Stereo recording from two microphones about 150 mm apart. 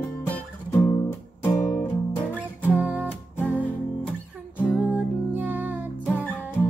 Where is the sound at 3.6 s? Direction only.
10° left (ahead or behind).